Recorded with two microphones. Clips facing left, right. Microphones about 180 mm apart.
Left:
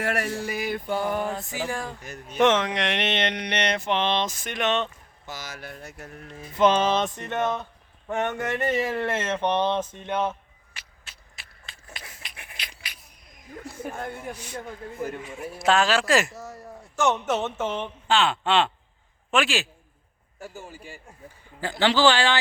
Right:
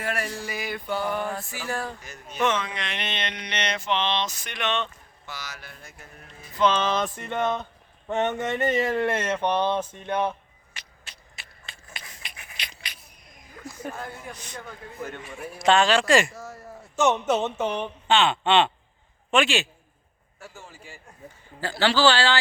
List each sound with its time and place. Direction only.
0.0 s mantra: 65° left (ahead or behind); by 1.0 s 50° left (ahead or behind)
1.3 s a man's voice: 20° left (ahead or behind)
2.4 s mantra: 90° left; by 6.1 s 60° left (ahead or behind)
6.5 s music: 20° left (ahead or behind)
7.4 s speech: 15° right (ahead or behind)
10.8 s a sound: 5° left (ahead or behind)
13.9 s a man's voice: 55° left (ahead or behind)
14.3 s a man's voice: 10° left (ahead or behind)
16.9 s speech: 20° right (ahead or behind)
18.1 s a man's voice: centre (ahead or behind)
21.6 s a man's voice: 20° left (ahead or behind)